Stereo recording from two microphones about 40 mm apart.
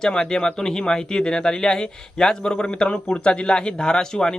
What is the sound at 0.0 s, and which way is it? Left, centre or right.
Speech, centre.